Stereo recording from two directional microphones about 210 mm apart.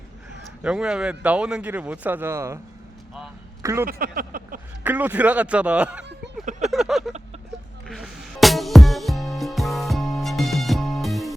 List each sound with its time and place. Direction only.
0.6 s a man's voice: 5° right (ahead or behind)
3.6 s a man's voice: 15° right (ahead or behind)
3.8 s a sound: 45° right (ahead or behind)
4.8 s a man's voice: 10° right (ahead or behind)
6.4 s a sound: 35° right (ahead or behind)
6.7 s vehicle: centre (ahead or behind)
7.9 s music: centre (ahead or behind)